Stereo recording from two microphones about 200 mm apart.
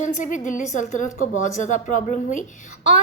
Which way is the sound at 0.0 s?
40° left (ahead or behind).